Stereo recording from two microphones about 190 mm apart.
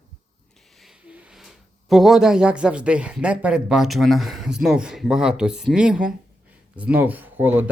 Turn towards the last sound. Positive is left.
turn(degrees=-10)  # may be behind; listen again after turning